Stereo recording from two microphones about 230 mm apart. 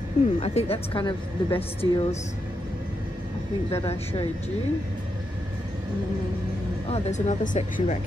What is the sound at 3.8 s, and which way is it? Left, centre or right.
Speech, left.